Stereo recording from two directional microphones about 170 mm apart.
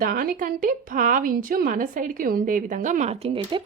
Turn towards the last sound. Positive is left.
turn(degrees=-30)  # may be behind; listen again after turning